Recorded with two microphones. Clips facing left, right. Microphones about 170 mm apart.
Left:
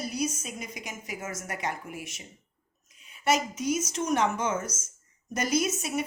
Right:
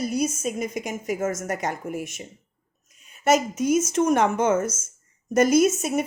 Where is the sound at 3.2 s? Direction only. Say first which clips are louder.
Right 6 dB; 45° right (ahead or behind).